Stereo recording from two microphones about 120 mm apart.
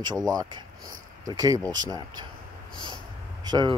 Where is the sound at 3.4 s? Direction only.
35° right (ahead or behind).